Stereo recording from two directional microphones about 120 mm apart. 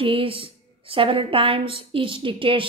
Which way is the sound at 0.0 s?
50° right (ahead or behind).